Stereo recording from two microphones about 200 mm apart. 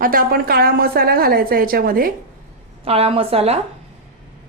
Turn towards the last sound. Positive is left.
turn(degrees=-30)  # may be behind; listen again after turning